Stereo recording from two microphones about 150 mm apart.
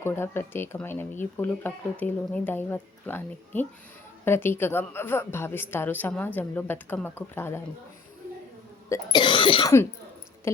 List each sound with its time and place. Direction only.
0.0 s speech: 15° left (ahead or behind)
9.1 s cough: 35° left (ahead or behind)